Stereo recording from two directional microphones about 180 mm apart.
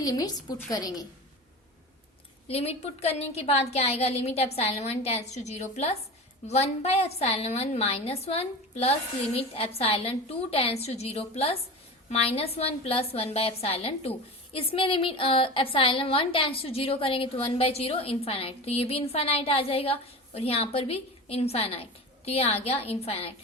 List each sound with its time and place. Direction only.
0.0 s a woman's voice: 20° left (ahead or behind)
2.5 s a woman's voice: 35° left (ahead or behind)